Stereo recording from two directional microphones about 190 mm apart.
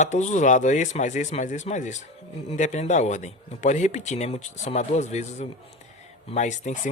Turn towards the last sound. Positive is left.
turn(degrees=40)  # may be behind; listen again after turning